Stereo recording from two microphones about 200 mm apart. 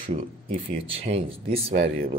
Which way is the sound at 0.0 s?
30° right (ahead or behind).